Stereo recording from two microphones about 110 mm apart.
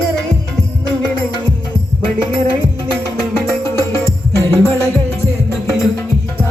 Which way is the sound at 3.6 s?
25° left (ahead or behind).